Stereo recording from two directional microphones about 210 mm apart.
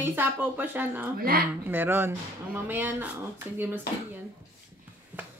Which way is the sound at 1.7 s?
10° right (ahead or behind).